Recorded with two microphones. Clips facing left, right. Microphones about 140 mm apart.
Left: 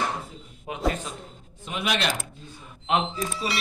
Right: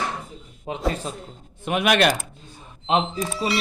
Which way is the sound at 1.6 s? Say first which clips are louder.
Right 8 dB; 65° right (ahead or behind).